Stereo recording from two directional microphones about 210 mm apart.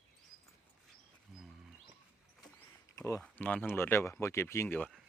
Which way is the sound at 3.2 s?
10° left (ahead or behind).